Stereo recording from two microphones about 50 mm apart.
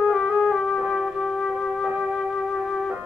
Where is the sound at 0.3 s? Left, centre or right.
Centre.